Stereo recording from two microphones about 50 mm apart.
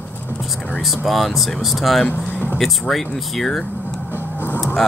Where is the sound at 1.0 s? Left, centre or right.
Centre.